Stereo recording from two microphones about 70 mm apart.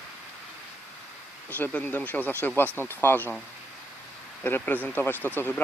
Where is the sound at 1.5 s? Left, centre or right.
Left.